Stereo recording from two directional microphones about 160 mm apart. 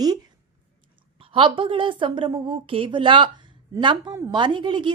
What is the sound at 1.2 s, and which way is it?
A woman's voice, 35° right (ahead or behind).